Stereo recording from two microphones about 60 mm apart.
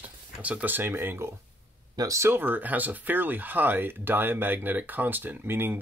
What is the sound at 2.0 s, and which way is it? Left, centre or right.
Speech, right.